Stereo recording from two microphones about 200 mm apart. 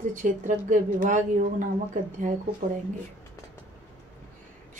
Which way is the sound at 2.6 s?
40° right (ahead or behind).